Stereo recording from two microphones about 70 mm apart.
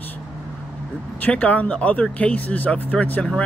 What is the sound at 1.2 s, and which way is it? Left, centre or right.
Speech, centre.